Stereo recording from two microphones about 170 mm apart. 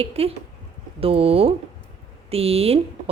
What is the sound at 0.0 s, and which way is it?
A woman's voice, 35° right (ahead or behind).